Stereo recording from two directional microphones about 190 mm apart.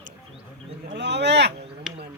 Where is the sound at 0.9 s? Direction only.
65° right (ahead or behind).